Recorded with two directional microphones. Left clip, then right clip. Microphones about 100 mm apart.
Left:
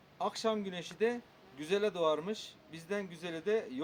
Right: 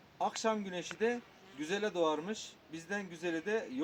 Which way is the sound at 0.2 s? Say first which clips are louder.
Even; 45° left (ahead or behind).